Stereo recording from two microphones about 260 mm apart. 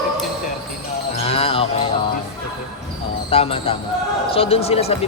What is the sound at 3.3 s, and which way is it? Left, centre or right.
Speech, left.